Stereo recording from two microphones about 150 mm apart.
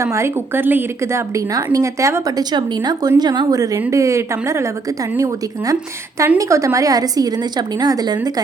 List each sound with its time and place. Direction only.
0.0 s a woman's voice: 20° right (ahead or behind)